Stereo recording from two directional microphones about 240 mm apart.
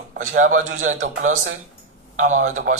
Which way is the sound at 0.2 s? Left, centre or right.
Right.